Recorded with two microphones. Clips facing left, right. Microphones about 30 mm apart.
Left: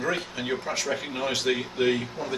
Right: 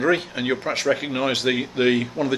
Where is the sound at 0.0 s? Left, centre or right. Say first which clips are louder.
Right 7 dB; right.